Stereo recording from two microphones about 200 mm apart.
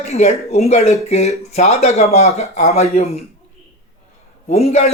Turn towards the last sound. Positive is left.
turn(degrees=35)  # may be behind; listen again after turning